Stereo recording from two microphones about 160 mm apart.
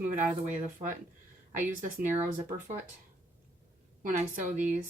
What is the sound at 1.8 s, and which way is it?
Speech, 55° right (ahead or behind).